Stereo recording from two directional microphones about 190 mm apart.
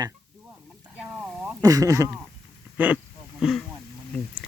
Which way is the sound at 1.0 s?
5° right (ahead or behind).